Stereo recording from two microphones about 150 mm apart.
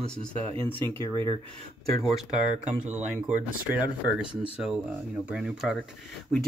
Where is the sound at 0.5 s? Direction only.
35° right (ahead or behind).